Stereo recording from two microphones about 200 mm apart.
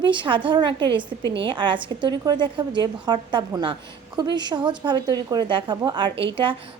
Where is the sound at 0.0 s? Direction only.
25° right (ahead or behind).